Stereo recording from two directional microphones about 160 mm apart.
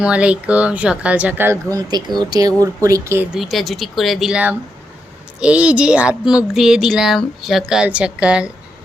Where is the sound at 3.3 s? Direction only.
Centre (ahead or behind).